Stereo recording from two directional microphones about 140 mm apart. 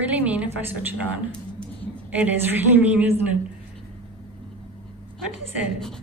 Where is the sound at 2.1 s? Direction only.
10° right (ahead or behind).